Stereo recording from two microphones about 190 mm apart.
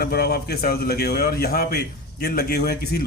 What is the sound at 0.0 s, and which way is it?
A man's voice, 55° left (ahead or behind).